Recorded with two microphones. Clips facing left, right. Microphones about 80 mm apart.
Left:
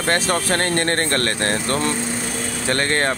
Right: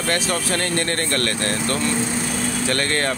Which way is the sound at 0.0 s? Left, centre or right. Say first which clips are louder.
Left 3 dB; left.